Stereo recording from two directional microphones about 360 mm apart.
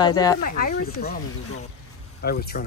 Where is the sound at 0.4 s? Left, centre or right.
Left.